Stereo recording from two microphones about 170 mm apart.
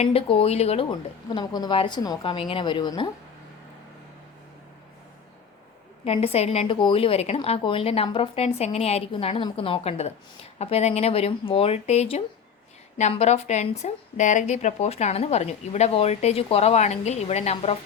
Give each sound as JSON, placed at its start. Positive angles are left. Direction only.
{"t": 0.0, "sound": "speech", "side_deg": 35}
{"t": 6.1, "sound": "speech", "side_deg": 35}